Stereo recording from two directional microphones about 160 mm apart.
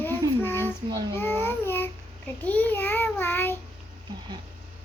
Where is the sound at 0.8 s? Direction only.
25° right (ahead or behind).